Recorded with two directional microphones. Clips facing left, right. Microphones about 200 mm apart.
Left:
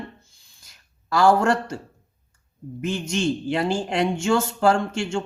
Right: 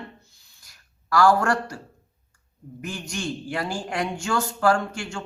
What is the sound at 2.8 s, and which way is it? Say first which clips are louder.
Speech: left 7 dB; 25° left (ahead or behind).